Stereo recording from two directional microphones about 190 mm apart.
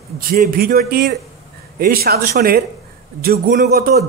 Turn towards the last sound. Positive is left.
turn(degrees=-55)  # may be behind; listen again after turning